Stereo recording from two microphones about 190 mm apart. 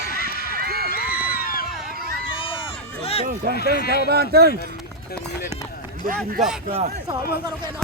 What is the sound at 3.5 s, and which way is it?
Speech, 55° left (ahead or behind).